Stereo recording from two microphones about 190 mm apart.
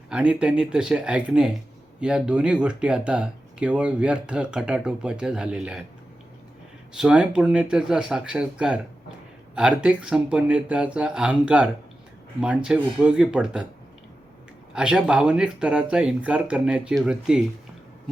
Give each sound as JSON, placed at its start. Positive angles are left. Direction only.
{"t": 0.1, "sound": "speech", "side_deg": -5}
{"t": 6.9, "sound": "speech", "side_deg": -5}
{"t": 14.7, "sound": "speech", "side_deg": -5}